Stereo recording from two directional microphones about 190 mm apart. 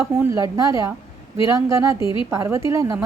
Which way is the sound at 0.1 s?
15° right (ahead or behind).